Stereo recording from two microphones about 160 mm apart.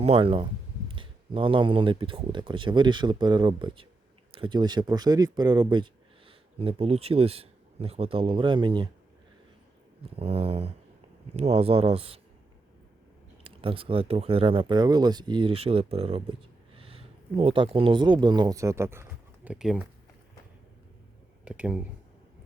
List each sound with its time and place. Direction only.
0.0 s speech: 35° right (ahead or behind)
10.2 s speech: 40° right (ahead or behind)
13.4 s speech: 35° right (ahead or behind); by 19.0 s 15° right (ahead or behind)
19.5 s speech: 5° right (ahead or behind)
21.4 s speech: 10° right (ahead or behind)